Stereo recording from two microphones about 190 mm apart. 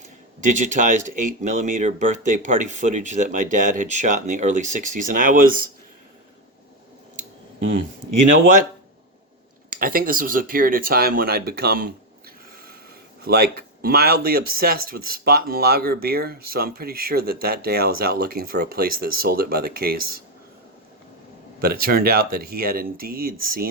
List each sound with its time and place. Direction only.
0.4 s speech: 40° right (ahead or behind)
9.6 s speech: 50° right (ahead or behind)
13.2 s speech: 55° right (ahead or behind)
21.6 s speech: 55° right (ahead or behind)